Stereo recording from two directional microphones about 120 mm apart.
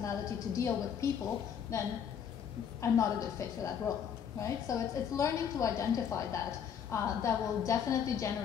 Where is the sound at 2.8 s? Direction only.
25° left (ahead or behind).